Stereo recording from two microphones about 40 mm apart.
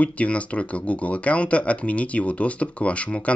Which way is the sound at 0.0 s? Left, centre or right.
Left.